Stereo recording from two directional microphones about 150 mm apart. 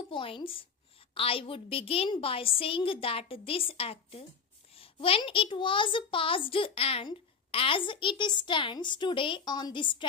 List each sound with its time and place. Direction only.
0.1 s a woman's voice: 35° left (ahead or behind)